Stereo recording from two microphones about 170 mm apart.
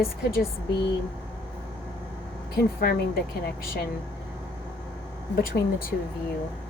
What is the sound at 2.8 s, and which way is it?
Speech, 65° left (ahead or behind).